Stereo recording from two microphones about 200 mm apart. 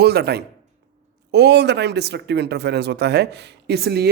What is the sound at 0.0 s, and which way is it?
A man's voice, 55° right (ahead or behind).